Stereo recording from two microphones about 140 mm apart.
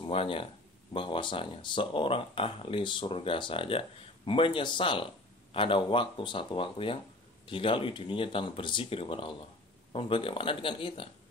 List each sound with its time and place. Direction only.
0.0 s speech: 40° left (ahead or behind)